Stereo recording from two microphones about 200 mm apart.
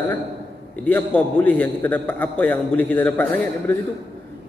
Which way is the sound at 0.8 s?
10° left (ahead or behind).